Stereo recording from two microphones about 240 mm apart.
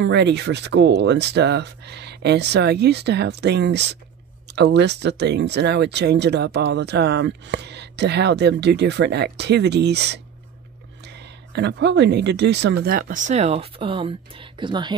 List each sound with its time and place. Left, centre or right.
0.0 s speech: right; by 15.0 s centre